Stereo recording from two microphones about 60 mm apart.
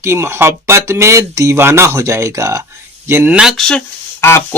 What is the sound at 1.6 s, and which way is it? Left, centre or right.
Speech, right.